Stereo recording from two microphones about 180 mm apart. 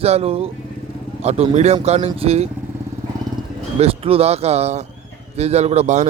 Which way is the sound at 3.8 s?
35° right (ahead or behind).